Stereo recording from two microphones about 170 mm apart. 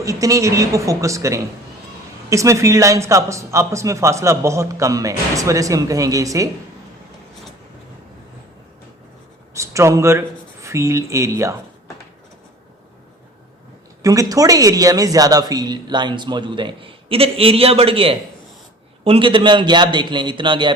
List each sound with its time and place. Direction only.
0.0 s speech: 20° right (ahead or behind)
9.6 s speech: 15° right (ahead or behind)
14.0 s speech: 20° right (ahead or behind)